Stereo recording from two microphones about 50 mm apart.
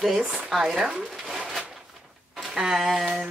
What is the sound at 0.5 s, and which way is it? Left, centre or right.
Speech, centre.